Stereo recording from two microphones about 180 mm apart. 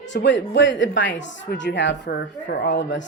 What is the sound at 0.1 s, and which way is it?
Speech, 80° left.